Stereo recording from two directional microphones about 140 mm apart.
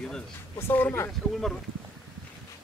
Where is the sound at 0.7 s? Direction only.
15° left (ahead or behind).